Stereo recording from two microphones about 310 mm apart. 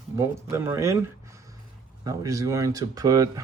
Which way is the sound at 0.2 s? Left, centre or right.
Centre.